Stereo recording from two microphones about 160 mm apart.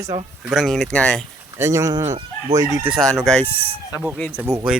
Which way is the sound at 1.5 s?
20° right (ahead or behind).